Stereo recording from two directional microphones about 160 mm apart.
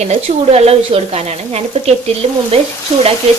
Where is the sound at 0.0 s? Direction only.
40° right (ahead or behind).